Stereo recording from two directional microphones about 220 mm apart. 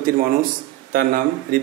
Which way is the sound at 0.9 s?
40° right (ahead or behind).